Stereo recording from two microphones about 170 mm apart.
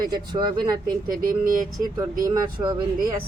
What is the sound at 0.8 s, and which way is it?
Speech, 55° right (ahead or behind).